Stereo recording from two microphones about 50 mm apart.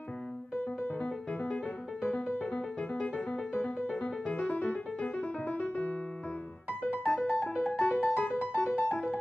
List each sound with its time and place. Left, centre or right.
1.0 s music: left
6.9 s music: left